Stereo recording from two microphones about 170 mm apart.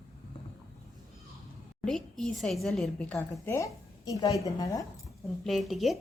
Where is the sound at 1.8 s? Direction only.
5° left (ahead or behind); by 4.8 s 20° left (ahead or behind).